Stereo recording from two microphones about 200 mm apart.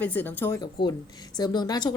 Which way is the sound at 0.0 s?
10° left (ahead or behind).